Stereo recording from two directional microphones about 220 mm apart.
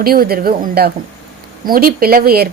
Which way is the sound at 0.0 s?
45° right (ahead or behind).